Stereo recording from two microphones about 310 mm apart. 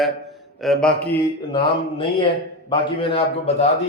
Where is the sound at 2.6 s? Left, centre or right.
Centre.